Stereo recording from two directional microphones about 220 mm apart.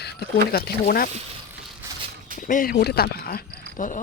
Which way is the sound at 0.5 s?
45° left (ahead or behind).